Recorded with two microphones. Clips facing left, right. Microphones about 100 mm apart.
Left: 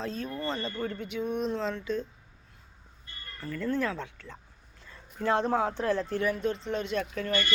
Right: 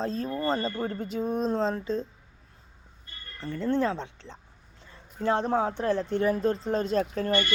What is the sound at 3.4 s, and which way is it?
Speech, 25° right (ahead or behind).